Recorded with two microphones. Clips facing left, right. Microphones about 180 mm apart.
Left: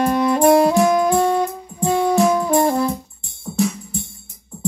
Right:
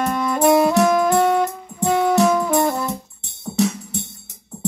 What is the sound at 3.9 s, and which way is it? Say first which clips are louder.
Music: even; 75° right (ahead or behind).